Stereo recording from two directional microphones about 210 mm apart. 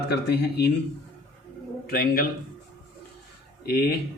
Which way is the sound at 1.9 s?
45° left (ahead or behind).